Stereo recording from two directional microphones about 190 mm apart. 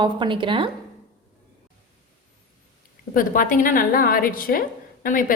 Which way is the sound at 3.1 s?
45° left (ahead or behind).